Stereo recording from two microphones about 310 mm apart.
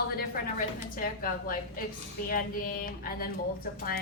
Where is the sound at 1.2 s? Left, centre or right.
Left.